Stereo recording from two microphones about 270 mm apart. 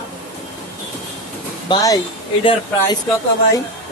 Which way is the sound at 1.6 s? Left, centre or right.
Centre.